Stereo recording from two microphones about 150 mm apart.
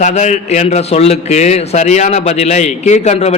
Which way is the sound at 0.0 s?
50° left (ahead or behind).